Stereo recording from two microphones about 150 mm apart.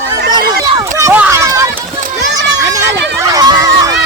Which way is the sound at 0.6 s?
20° right (ahead or behind).